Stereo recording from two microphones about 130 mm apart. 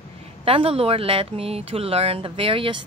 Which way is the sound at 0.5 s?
45° right (ahead or behind).